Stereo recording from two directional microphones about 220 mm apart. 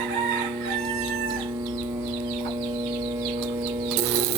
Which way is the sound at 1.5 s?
20° right (ahead or behind).